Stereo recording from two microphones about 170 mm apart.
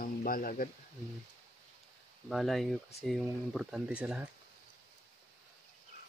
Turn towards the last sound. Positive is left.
turn(degrees=-5)  # may be behind; listen again after turning